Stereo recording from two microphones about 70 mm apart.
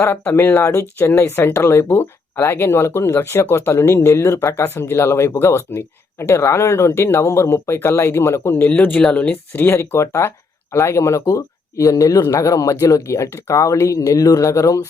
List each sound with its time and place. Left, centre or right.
0.3 s speech: left
0.7 s speech: left
8.5 s speech: left
9.5 s speech: left